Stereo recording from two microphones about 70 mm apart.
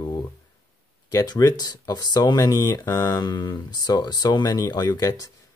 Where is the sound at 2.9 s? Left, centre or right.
Left.